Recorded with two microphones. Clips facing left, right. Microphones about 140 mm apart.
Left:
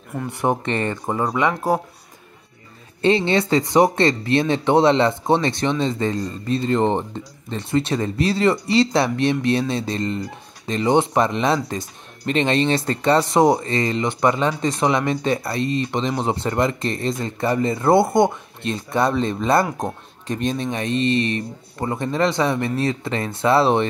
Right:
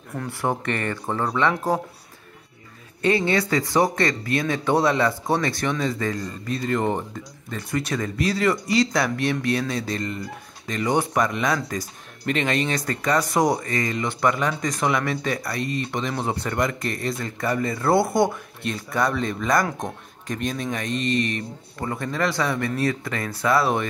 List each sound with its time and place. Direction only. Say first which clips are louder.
0.3 s speech: left 4 dB; 20° left (ahead or behind)
3.0 s speech: left 3 dB; 25° left (ahead or behind)